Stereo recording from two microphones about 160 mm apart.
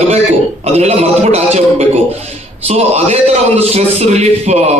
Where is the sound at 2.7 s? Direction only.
40° right (ahead or behind).